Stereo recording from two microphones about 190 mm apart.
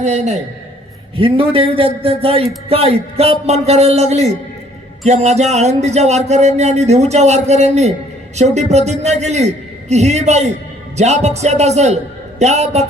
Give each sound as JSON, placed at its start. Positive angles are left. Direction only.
{"t": 0.0, "sound": "a man's voice", "side_deg": -35}